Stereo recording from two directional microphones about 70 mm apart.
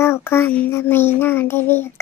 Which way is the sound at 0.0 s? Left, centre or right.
Left.